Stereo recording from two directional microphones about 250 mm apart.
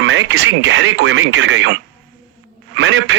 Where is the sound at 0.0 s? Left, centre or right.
Right.